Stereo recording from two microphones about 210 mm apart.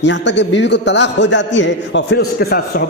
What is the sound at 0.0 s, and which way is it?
A man's voice, 60° left (ahead or behind).